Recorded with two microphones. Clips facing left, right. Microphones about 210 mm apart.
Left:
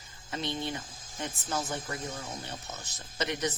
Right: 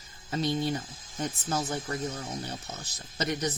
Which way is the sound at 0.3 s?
40° right (ahead or behind).